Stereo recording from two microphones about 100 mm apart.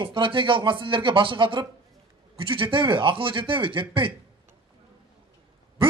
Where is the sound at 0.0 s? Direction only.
60° right (ahead or behind).